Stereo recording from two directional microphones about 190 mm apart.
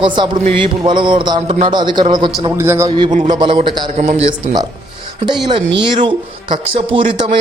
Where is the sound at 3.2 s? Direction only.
25° right (ahead or behind).